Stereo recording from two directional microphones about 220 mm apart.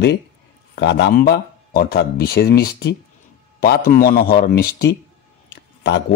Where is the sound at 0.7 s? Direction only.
50° left (ahead or behind).